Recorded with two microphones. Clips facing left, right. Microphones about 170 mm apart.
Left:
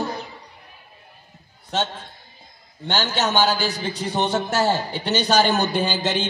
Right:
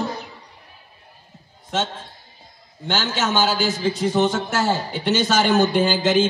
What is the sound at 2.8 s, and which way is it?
A man's voice, 35° left (ahead or behind).